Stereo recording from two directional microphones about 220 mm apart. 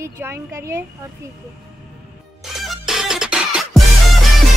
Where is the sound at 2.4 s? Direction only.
Centre (ahead or behind).